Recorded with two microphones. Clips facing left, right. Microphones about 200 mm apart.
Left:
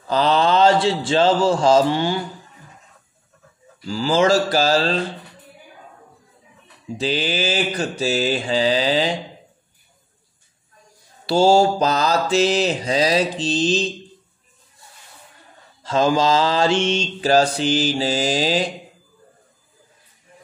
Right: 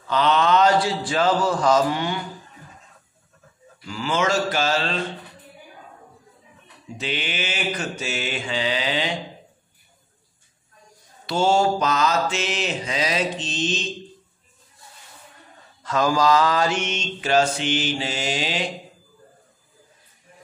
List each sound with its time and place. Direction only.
0.0 s a man's voice: 35° left (ahead or behind)
3.8 s mantra: 30° left (ahead or behind)
7.0 s mantra: 35° left (ahead or behind)
11.2 s mantra: 30° left (ahead or behind)
15.8 s mantra: 25° left (ahead or behind)